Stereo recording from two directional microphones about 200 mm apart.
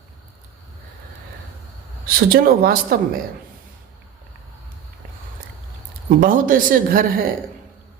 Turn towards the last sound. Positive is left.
turn(degrees=-45)  # may be behind; listen again after turning